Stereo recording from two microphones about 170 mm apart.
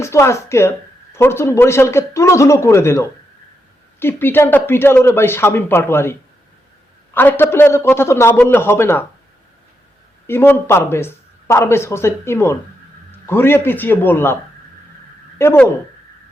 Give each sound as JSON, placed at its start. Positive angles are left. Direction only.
{"t": 0.0, "sound": "speech", "side_deg": 15}
{"t": 10.2, "sound": "speech", "side_deg": 15}
{"t": 15.4, "sound": "speech", "side_deg": 15}